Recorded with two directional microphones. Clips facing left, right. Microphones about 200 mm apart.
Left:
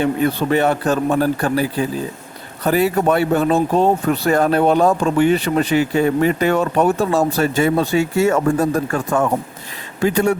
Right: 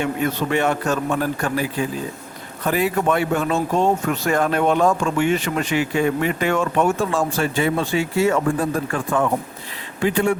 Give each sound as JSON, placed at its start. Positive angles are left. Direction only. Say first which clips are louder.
{"t": 0.0, "sound": "speech", "louder": "left 4 dB", "side_deg": 35}